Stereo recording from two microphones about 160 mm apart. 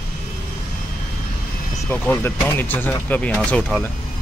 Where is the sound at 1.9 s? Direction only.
15° left (ahead or behind).